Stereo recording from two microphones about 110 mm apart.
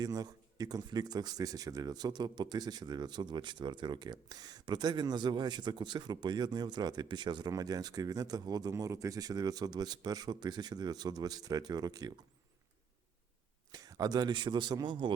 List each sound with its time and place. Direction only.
0.0 s speech: 35° right (ahead or behind)
13.7 s speech: 35° right (ahead or behind)